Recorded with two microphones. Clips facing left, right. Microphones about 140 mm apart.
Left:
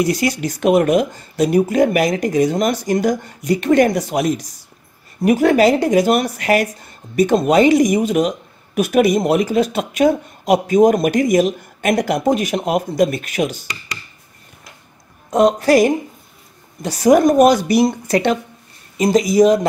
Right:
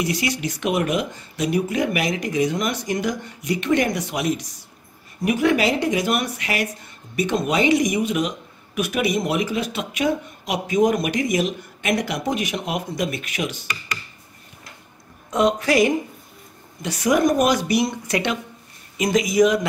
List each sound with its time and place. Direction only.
0.0 s speech: 40° left (ahead or behind)
15.3 s speech: 40° left (ahead or behind)